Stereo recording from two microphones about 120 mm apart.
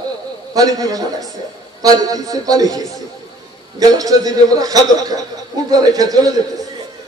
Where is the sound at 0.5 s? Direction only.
30° right (ahead or behind).